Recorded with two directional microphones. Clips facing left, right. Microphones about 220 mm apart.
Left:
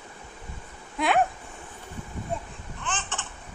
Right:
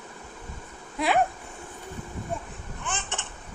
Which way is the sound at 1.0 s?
Centre (ahead or behind).